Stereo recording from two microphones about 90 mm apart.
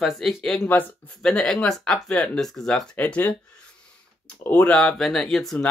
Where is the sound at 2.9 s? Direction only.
15° left (ahead or behind).